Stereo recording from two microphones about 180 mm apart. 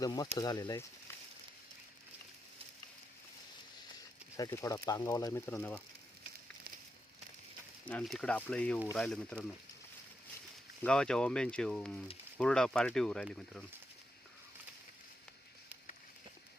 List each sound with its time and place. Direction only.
0.0 s speech: 20° left (ahead or behind)
4.4 s speech: 20° left (ahead or behind)
7.9 s speech: 5° left (ahead or behind)
10.8 s speech: 5° left (ahead or behind)